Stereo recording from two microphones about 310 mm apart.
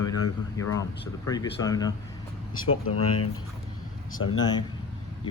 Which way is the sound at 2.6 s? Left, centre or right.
Left.